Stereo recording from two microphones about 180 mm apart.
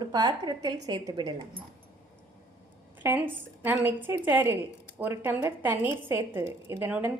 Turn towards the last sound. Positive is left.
turn(degrees=-10)  # may be behind; listen again after turning